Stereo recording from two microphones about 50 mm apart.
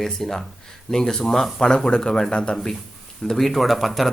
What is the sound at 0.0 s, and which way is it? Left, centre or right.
Speech, centre.